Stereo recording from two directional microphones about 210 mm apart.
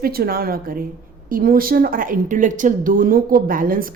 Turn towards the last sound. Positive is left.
turn(degrees=-45)  # may be behind; listen again after turning